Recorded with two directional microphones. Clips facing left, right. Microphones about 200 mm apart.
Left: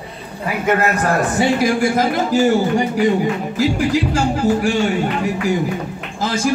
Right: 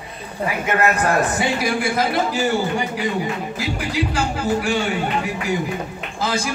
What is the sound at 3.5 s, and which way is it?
Speech, 45° left (ahead or behind).